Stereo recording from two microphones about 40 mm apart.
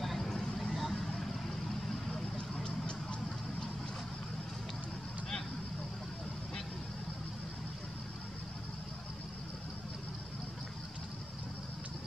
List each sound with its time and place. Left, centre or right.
0.3 s vehicle: centre
2.3 s vehicle: left